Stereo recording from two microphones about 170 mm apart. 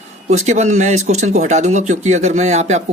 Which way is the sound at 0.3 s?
40° right (ahead or behind).